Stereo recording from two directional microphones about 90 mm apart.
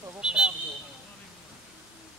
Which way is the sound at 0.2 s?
10° right (ahead or behind).